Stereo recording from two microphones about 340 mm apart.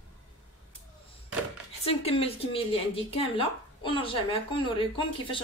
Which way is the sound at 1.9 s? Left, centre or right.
Centre.